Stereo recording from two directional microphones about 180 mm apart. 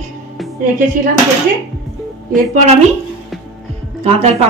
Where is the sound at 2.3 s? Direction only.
45° right (ahead or behind).